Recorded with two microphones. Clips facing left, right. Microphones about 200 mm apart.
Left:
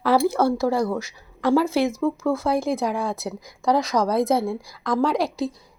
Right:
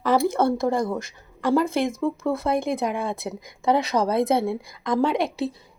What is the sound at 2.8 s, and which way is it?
Speech, centre (ahead or behind).